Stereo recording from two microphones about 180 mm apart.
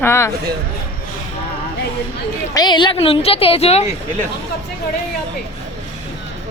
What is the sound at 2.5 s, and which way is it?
A woman's voice, 25° left (ahead or behind).